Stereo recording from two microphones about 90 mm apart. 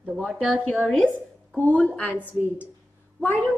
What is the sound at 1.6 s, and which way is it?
Speech, 15° left (ahead or behind).